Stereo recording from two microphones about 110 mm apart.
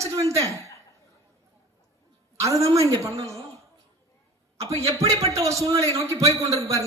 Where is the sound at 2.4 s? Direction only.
30° right (ahead or behind).